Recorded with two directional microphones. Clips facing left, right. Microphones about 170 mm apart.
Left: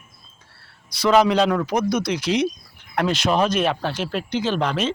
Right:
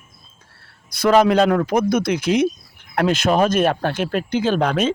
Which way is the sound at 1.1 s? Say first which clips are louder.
Right 2 dB; 50° right (ahead or behind).